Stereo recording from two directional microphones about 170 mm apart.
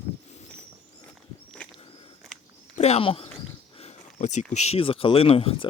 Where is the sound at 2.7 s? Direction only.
40° left (ahead or behind).